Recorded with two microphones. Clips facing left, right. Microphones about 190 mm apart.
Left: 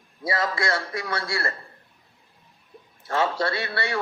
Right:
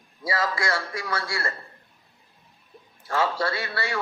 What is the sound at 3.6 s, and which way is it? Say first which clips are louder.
Speech: left 2 dB; 25° left (ahead or behind).